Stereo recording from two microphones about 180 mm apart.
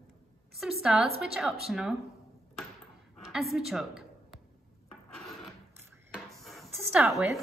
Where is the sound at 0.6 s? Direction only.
Centre (ahead or behind).